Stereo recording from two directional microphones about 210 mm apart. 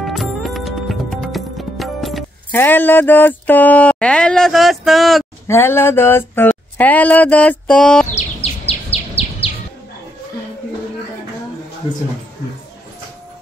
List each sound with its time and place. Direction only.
0.0 s music: centre (ahead or behind)
2.6 s speech: 10° left (ahead or behind)
5.5 s speech: 10° left (ahead or behind)
8.1 s bird vocalization: 30° left (ahead or behind)